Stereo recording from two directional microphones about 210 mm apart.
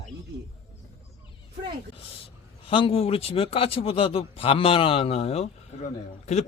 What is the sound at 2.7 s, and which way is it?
A man's voice, 25° left (ahead or behind).